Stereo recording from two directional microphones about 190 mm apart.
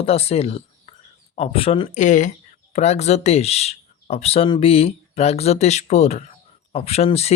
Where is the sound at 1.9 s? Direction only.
40° left (ahead or behind).